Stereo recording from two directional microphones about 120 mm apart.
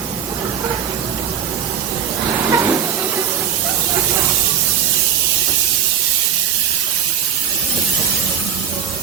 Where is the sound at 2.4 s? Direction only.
25° right (ahead or behind).